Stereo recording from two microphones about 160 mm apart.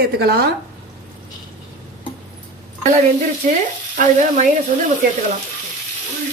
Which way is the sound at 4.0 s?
55° right (ahead or behind).